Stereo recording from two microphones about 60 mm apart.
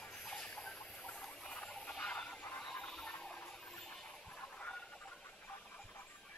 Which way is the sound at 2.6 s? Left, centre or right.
Centre.